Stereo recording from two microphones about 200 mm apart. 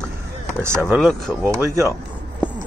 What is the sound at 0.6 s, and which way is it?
Speech, 10° right (ahead or behind).